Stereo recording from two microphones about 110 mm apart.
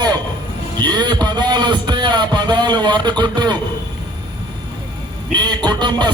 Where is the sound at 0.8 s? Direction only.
40° right (ahead or behind).